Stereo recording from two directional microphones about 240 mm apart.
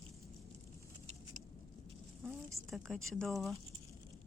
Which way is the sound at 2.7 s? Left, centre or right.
Centre.